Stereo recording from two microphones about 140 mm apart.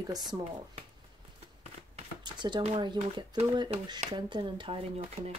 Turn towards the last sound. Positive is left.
turn(degrees=-45)  # may be behind; listen again after turning